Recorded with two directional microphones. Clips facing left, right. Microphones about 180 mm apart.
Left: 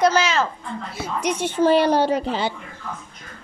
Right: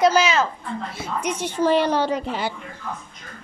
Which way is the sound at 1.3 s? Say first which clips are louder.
Left 3 dB; 25° left (ahead or behind).